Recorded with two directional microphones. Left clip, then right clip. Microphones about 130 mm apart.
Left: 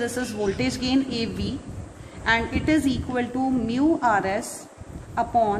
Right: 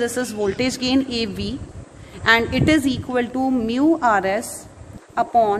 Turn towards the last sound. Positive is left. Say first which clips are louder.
# right 4 dB
turn(degrees=-80)